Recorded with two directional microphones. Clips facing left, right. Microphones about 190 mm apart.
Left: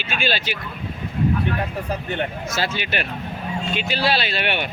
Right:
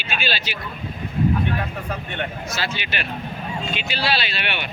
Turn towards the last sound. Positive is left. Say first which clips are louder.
# left 4 dB
turn(degrees=45)  # may be behind; listen again after turning